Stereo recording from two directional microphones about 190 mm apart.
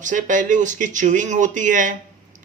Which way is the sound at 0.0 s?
40° right (ahead or behind).